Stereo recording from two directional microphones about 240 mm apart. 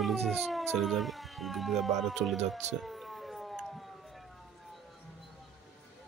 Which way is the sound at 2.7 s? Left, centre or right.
Centre.